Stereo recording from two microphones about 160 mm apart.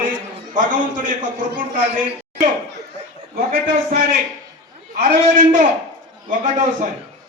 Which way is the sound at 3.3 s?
65° right (ahead or behind).